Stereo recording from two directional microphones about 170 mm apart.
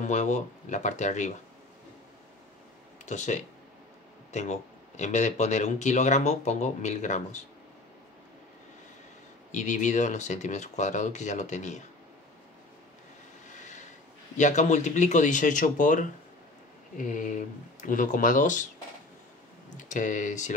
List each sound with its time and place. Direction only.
0.0 s speech: 45° left (ahead or behind)
3.1 s speech: 45° left (ahead or behind)
9.5 s speech: 45° left (ahead or behind)
13.5 s vehicle: 45° left (ahead or behind)
14.3 s speech: 45° left (ahead or behind)
19.8 s speech: 50° left (ahead or behind)